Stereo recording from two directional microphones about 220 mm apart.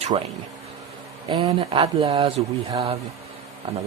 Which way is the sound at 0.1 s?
30° right (ahead or behind).